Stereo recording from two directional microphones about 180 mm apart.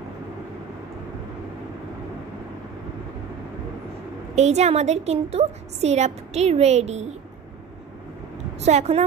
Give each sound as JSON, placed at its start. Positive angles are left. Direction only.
{"t": 4.4, "sound": "a woman's voice", "side_deg": -40}
{"t": 8.5, "sound": "a woman's voice", "side_deg": -40}